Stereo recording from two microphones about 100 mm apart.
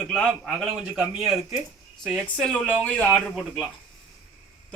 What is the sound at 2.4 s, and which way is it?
Speech, 10° left (ahead or behind).